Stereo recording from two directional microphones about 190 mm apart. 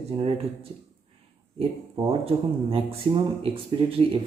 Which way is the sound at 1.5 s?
30° right (ahead or behind).